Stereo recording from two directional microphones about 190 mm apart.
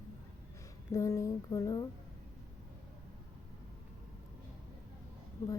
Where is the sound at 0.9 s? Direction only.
15° left (ahead or behind).